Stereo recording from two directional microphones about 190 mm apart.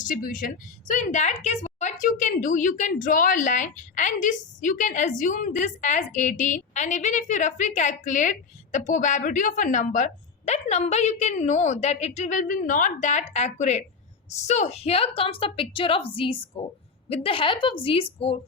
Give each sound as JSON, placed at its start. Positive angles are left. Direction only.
{"t": 0.0, "sound": "a woman's voice", "side_deg": 45}